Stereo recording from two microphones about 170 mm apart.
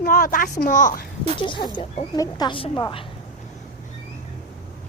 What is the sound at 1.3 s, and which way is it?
Speech, 30° left (ahead or behind).